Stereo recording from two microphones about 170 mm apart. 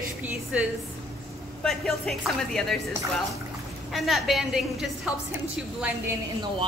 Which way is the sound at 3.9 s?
Centre (ahead or behind).